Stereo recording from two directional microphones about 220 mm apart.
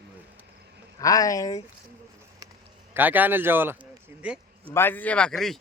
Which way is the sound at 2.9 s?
10° right (ahead or behind).